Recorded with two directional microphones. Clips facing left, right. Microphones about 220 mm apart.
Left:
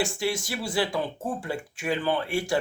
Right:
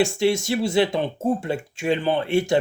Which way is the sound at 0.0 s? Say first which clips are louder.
Right 8 dB; 25° right (ahead or behind).